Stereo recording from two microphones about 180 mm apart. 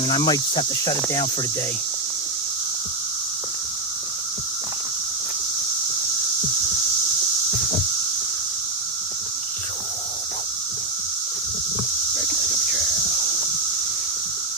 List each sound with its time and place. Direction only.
0.0 s cricket: 25° left (ahead or behind)